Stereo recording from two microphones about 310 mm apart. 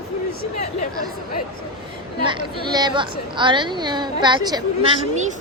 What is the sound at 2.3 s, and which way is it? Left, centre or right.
A woman's voice, centre.